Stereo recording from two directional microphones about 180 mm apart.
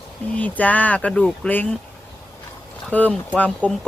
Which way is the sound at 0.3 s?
10° left (ahead or behind).